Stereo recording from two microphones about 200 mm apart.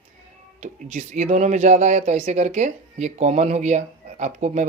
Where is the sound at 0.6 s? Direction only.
35° right (ahead or behind).